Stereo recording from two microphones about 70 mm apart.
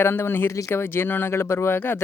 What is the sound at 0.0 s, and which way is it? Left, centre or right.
Speech, left.